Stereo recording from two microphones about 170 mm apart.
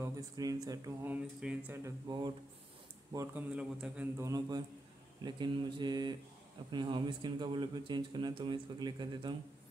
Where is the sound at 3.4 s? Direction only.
5° right (ahead or behind).